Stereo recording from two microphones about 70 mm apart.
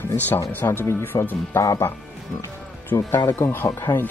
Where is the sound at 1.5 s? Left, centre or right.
Left.